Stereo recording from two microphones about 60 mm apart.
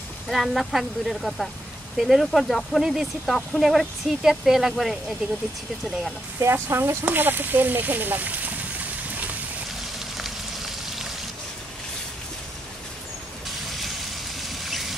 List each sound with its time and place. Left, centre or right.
0.3 s speech: centre
6.4 s speech: right
7.1 s speech: right
9.9 s frying: centre
14.5 s a sound: centre